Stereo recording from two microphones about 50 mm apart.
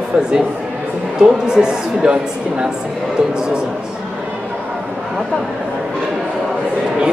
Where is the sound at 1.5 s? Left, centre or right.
Centre.